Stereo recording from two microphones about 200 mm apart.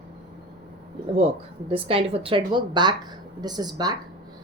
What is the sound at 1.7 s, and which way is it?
A woman's voice, 30° right (ahead or behind).